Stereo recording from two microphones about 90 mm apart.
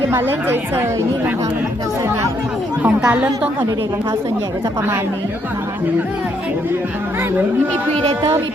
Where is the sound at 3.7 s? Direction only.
35° right (ahead or behind).